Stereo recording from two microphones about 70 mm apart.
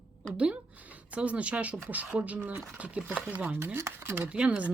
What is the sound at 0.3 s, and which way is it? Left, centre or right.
Speech, centre.